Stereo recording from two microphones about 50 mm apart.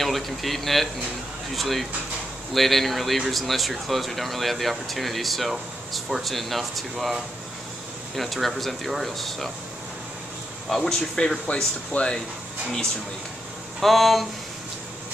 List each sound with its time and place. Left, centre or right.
0.0 s speech: centre
8.2 s speech: centre
10.7 s speech: centre
13.7 s speech: centre